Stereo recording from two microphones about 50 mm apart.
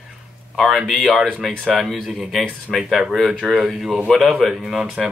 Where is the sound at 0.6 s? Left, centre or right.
Centre.